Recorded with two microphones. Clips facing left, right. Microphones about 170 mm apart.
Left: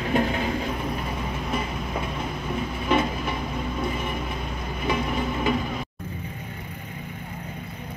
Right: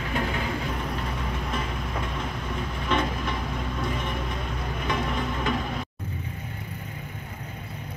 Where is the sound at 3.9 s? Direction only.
5° left (ahead or behind).